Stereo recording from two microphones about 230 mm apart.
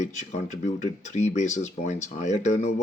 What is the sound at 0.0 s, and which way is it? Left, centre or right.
Speech, left.